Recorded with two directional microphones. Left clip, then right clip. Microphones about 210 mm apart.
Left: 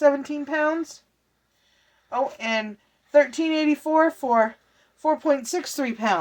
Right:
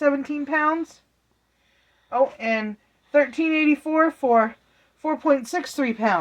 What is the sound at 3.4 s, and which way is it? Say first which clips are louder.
Speech: right 2 dB; 35° right (ahead or behind).